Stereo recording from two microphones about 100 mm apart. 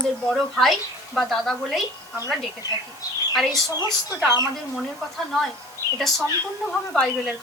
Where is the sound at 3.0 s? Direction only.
40° left (ahead or behind).